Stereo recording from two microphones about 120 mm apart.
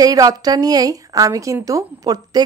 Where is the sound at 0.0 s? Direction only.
30° right (ahead or behind).